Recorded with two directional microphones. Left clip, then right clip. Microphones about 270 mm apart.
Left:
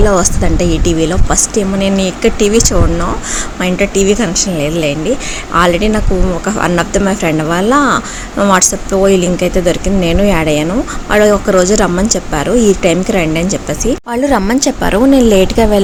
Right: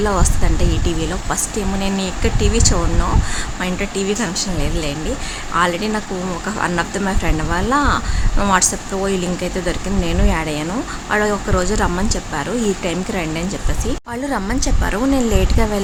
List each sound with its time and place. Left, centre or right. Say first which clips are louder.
0.0 s a woman's voice: left 8 dB; centre